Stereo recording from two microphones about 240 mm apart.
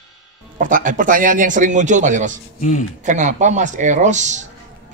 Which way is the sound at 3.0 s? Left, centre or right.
Right.